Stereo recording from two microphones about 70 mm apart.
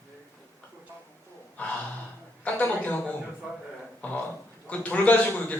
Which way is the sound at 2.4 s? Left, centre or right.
Left.